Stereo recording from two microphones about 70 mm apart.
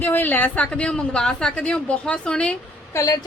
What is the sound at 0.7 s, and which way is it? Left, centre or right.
A woman's voice, centre.